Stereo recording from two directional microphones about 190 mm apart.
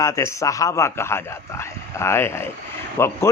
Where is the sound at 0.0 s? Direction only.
15° left (ahead or behind).